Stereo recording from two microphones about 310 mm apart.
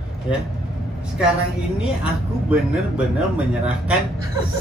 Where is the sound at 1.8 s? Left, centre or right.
Centre.